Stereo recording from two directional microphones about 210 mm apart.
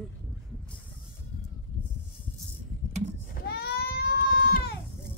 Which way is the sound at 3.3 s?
50° left (ahead or behind).